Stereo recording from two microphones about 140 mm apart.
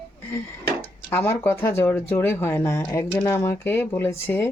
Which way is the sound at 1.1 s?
15° left (ahead or behind).